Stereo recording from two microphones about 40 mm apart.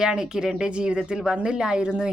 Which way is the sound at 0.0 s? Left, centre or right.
Centre.